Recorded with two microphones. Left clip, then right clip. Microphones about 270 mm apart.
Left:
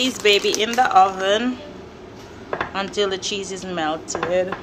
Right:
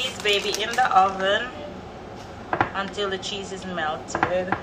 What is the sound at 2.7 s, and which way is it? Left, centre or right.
A woman's voice, left.